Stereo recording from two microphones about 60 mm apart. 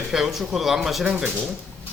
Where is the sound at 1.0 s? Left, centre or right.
Centre.